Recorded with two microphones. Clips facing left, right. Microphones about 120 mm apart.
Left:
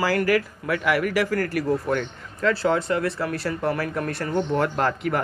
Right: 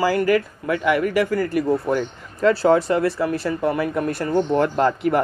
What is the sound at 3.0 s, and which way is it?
Speech, 5° right (ahead or behind).